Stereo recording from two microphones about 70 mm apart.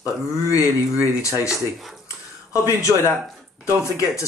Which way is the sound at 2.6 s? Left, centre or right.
Left.